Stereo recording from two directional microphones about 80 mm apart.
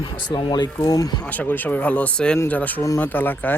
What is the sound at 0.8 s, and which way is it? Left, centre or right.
Speech, left.